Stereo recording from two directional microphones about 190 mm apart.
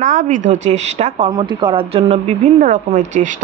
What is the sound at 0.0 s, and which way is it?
A woman's voice, 40° right (ahead or behind).